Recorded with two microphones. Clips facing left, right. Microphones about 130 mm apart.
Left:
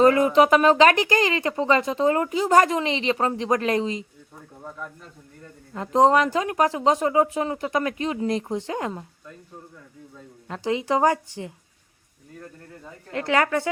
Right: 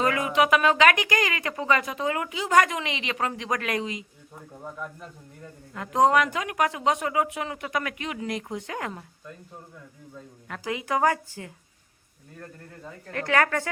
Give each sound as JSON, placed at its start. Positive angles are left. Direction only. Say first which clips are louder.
{"t": 0.0, "sound": "speech", "louder": "left 7 dB", "side_deg": 35}
{"t": 4.6, "sound": "speech", "louder": "even", "side_deg": -5}
{"t": 5.7, "sound": "speech", "louder": "left 3 dB", "side_deg": 30}
{"t": 10.5, "sound": "speech", "louder": "left 5 dB", "side_deg": 25}
{"t": 13.1, "sound": "speech", "louder": "left 2 dB", "side_deg": 20}